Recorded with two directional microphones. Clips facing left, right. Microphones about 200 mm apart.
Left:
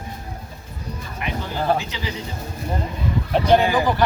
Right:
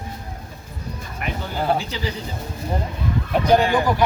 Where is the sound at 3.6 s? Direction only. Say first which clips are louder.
Even; 5° left (ahead or behind).